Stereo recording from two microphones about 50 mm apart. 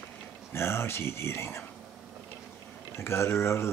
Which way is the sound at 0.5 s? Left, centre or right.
Left.